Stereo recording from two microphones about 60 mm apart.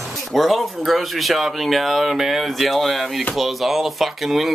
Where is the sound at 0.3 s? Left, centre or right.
Centre.